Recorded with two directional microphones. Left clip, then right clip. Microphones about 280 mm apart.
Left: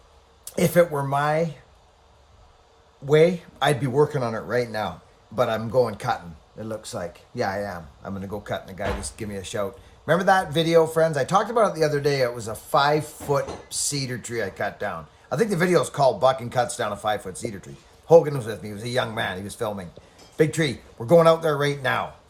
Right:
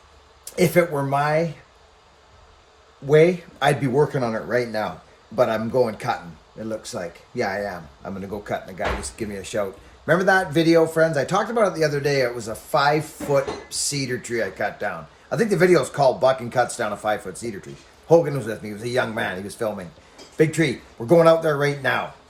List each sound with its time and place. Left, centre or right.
0.4 s speech: centre
3.1 s speech: centre